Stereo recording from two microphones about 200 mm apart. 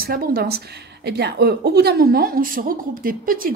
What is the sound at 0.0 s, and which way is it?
A woman's voice, 50° right (ahead or behind).